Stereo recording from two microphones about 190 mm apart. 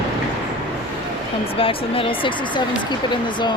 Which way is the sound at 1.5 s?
30° left (ahead or behind).